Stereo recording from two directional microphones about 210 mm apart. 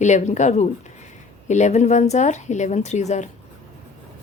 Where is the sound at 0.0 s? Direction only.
35° left (ahead or behind).